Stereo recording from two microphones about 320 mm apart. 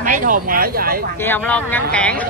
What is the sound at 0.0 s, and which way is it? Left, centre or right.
Speech, right.